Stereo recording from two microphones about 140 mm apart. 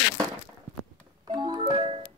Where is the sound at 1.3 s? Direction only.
30° right (ahead or behind).